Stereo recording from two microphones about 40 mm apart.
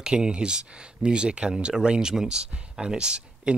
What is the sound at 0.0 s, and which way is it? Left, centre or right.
Speech, right.